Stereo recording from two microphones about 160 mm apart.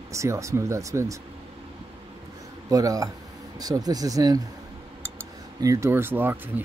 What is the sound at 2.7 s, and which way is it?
Speech, 20° right (ahead or behind).